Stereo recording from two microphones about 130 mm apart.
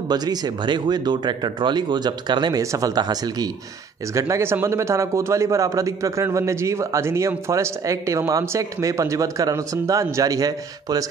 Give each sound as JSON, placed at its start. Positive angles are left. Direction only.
{"t": 0.1, "sound": "speech", "side_deg": -30}